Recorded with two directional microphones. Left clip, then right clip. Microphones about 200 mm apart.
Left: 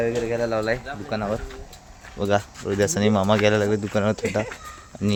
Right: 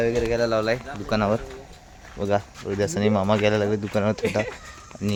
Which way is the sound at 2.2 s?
5° left (ahead or behind).